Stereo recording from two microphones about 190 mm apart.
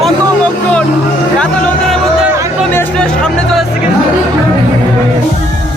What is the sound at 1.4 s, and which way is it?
Music, 5° left (ahead or behind).